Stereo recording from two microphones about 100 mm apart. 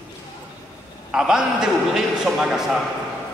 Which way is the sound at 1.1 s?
5° right (ahead or behind).